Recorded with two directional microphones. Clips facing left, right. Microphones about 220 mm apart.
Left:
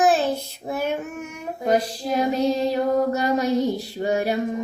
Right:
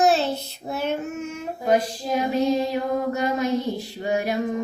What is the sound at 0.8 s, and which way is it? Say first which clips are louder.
Child singing: right 1 dB; 10° left (ahead or behind).